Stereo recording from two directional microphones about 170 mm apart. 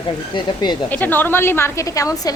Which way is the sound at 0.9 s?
10° left (ahead or behind).